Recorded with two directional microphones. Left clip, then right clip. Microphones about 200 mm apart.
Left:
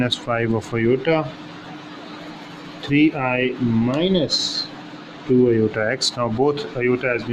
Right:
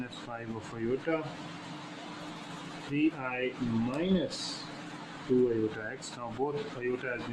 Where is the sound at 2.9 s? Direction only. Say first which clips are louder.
Left 13 dB; 50° left (ahead or behind).